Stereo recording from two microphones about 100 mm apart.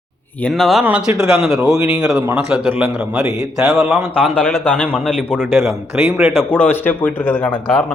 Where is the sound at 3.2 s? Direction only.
30° right (ahead or behind).